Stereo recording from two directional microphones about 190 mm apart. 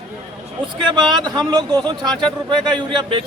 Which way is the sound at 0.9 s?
25° right (ahead or behind).